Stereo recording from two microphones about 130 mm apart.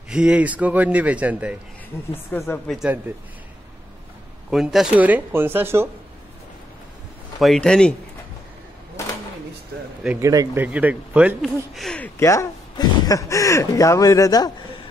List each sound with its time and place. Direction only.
0.1 s a man's voice: 5° right (ahead or behind)
2.3 s a woman's voice: 15° left (ahead or behind)
4.5 s a man's voice: 5° right (ahead or behind)
7.3 s speech: centre (ahead or behind)
10.2 s speech: 25° right (ahead or behind)
10.6 s a man's voice: 10° right (ahead or behind)
11.4 s speech: centre (ahead or behind)
12.0 s speech: 20° left (ahead or behind)